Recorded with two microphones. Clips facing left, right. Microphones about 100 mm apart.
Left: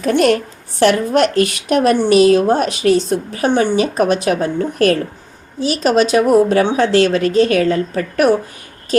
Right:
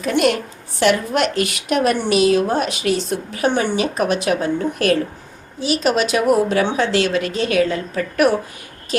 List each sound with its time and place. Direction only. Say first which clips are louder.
0.0 s a woman's voice: left 4 dB; 40° left (ahead or behind)